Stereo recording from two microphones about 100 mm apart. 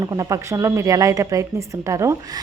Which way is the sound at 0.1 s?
35° right (ahead or behind).